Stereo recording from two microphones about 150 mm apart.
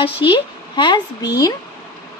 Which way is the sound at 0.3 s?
30° left (ahead or behind).